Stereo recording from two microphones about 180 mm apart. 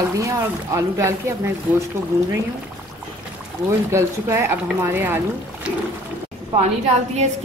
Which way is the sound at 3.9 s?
15° right (ahead or behind).